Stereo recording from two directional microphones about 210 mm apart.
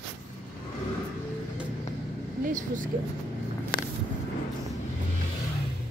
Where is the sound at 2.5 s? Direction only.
35° right (ahead or behind).